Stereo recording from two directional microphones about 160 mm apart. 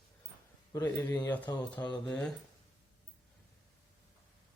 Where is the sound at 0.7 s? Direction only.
15° left (ahead or behind).